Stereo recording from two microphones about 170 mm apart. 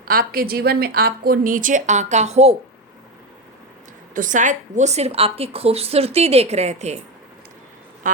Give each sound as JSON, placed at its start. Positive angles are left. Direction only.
{"t": 0.0, "sound": "a woman's voice", "side_deg": -60}
{"t": 4.1, "sound": "a woman's voice", "side_deg": -50}
{"t": 8.0, "sound": "a sound", "side_deg": -50}